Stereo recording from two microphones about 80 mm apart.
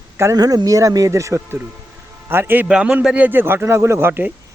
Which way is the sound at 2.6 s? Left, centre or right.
Centre.